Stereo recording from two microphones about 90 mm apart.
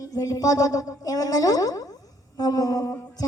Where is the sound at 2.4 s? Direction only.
45° left (ahead or behind).